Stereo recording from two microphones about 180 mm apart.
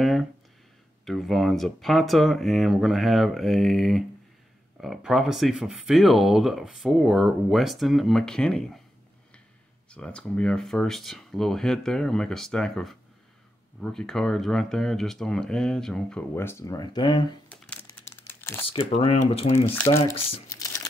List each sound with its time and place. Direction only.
0.0 s a sound: centre (ahead or behind)
1.0 s speech: centre (ahead or behind)
9.8 s speech: 5° left (ahead or behind); by 17.4 s 25° left (ahead or behind)
17.5 s crumpling: 10° left (ahead or behind)
18.7 s speech: 30° left (ahead or behind)
19.5 s speech: 10° left (ahead or behind)
20.5 s a sound: 20° left (ahead or behind)